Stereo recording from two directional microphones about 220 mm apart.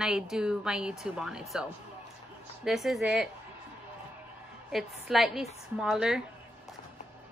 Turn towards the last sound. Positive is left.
turn(degrees=-5)  # may be behind; listen again after turning